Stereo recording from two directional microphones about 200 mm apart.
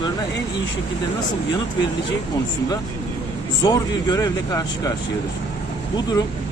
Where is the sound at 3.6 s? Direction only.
20° left (ahead or behind).